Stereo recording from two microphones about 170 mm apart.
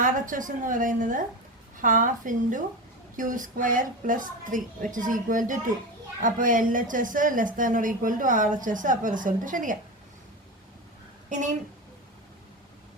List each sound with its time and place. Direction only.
0.0 s a woman's voice: 50° right (ahead or behind)
11.3 s speech: 45° right (ahead or behind)